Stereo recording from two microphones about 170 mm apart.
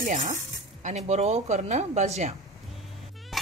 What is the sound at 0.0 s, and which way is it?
Speech, 50° right (ahead or behind).